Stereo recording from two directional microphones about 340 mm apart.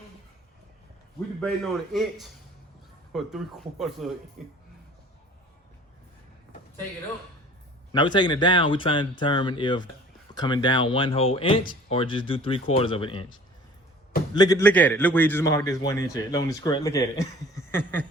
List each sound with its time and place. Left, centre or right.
1.4 s speech: centre
7.9 s a man's voice: centre
14.3 s a man's voice: centre